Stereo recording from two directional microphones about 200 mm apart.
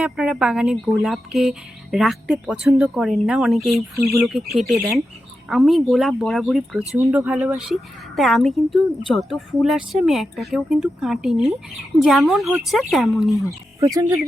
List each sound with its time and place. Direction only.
0.0 s speech: 5° right (ahead or behind)
6.9 s speech: 10° right (ahead or behind)
13.7 s speech: 15° right (ahead or behind)